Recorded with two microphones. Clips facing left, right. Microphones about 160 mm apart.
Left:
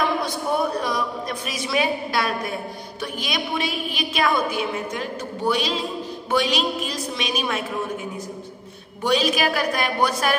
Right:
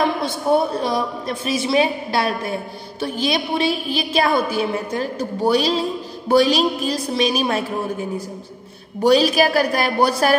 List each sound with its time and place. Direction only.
0.2 s a woman's voice: 25° right (ahead or behind)